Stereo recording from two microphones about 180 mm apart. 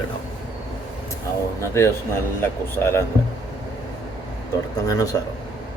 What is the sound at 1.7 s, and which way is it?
A man's voice, 15° left (ahead or behind).